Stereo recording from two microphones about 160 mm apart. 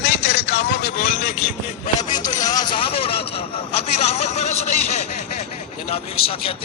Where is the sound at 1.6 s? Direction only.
50° left (ahead or behind).